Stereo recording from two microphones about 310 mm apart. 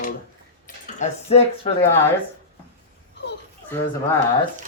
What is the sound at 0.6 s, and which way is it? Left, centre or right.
Cutlery, left.